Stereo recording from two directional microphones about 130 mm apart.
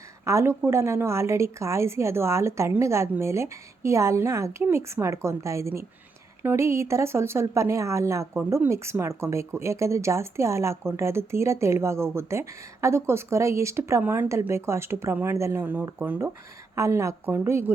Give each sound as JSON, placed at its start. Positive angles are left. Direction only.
{"t": 0.3, "sound": "speech", "side_deg": -20}